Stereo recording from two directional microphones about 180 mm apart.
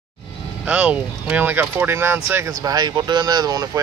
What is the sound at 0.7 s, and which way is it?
Speech, 5° right (ahead or behind).